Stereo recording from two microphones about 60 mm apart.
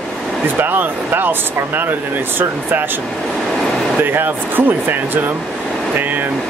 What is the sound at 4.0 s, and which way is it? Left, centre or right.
Speech, right.